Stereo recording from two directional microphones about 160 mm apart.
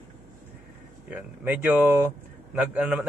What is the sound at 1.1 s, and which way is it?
A man's voice, 10° right (ahead or behind).